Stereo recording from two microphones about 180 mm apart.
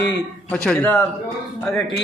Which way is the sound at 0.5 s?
5° left (ahead or behind).